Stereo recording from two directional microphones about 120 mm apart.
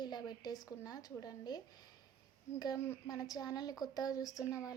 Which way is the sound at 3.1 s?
30° left (ahead or behind).